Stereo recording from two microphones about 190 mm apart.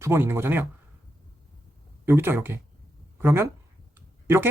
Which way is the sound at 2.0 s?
10° right (ahead or behind).